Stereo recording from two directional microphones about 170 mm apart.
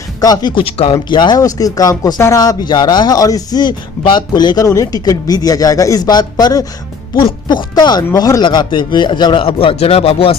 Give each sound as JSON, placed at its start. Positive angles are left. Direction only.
{"t": 0.2, "sound": "speech", "side_deg": 25}